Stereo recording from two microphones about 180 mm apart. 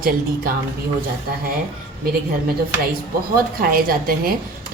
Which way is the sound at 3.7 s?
55° right (ahead or behind).